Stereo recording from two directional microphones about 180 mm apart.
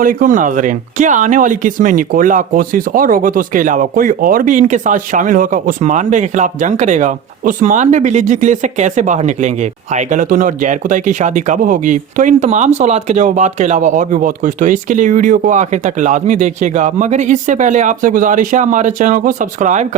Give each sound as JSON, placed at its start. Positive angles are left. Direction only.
{"t": 0.0, "sound": "speech", "side_deg": -50}